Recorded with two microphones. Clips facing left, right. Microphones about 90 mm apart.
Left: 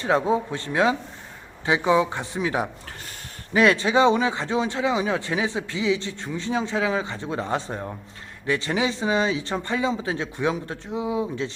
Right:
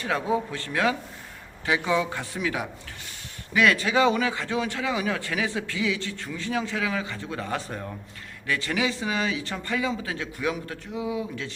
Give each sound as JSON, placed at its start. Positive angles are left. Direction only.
{"t": 0.0, "sound": "speech", "side_deg": 30}